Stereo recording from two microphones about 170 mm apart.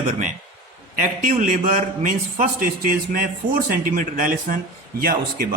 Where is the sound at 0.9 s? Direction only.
50° right (ahead or behind).